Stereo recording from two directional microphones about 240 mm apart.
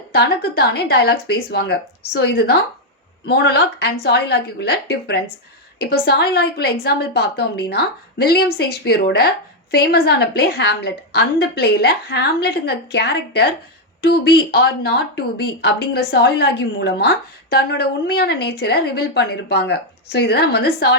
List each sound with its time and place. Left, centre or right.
0.1 s a woman's voice: left